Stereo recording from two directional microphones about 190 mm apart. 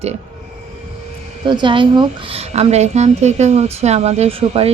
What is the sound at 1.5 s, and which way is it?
A woman's voice, 25° right (ahead or behind).